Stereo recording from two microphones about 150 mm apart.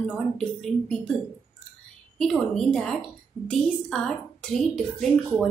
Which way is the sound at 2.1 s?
5° left (ahead or behind).